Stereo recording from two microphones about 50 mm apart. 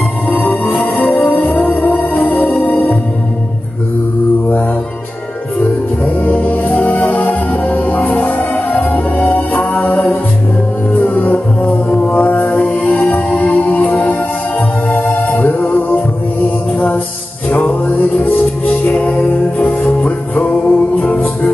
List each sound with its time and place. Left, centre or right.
0.3 s music: left
5.6 s music: left